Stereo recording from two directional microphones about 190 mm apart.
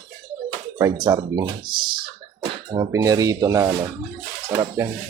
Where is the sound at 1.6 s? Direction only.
50° right (ahead or behind).